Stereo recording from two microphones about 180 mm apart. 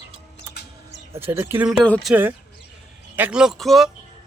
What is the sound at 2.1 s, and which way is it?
Speech, 10° right (ahead or behind).